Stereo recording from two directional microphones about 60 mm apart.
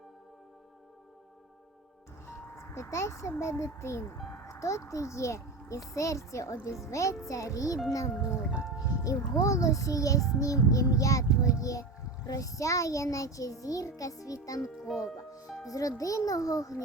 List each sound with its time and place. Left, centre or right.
2.2 s a child's voice: left
14.8 s speech: centre
15.6 s a child's voice: left